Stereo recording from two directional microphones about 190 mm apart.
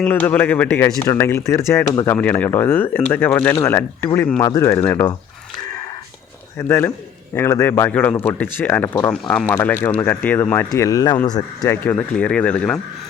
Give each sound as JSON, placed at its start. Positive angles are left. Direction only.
{"t": 0.0, "sound": "speech", "side_deg": 10}
{"t": 4.4, "sound": "speech", "side_deg": 20}
{"t": 6.6, "sound": "speech", "side_deg": 10}
{"t": 11.8, "sound": "speech", "side_deg": 10}